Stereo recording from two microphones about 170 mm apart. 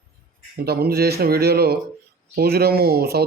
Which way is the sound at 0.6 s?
65° right (ahead or behind).